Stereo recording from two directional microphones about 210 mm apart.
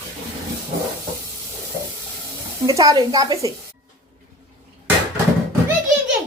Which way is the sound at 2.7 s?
15° right (ahead or behind).